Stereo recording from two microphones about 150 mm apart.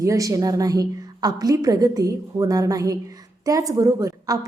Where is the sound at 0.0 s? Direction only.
20° right (ahead or behind).